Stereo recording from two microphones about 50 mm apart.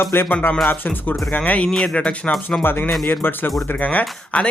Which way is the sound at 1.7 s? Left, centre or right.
Centre.